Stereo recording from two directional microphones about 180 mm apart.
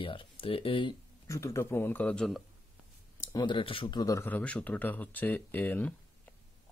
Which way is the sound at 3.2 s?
25° left (ahead or behind).